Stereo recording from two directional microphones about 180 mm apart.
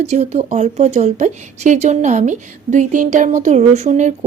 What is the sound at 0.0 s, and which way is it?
A woman's voice, 40° right (ahead or behind).